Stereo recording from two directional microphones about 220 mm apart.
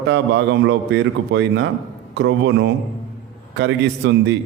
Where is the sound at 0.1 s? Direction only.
55° right (ahead or behind).